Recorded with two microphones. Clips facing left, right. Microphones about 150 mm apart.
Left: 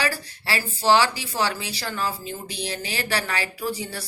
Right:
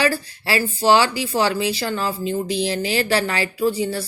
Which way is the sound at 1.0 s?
30° right (ahead or behind).